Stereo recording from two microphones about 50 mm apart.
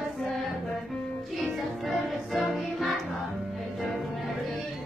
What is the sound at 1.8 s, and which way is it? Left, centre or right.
Music, centre.